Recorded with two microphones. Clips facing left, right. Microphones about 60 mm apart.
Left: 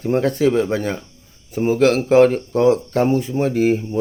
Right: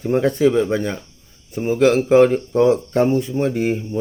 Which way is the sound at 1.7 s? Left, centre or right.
Centre.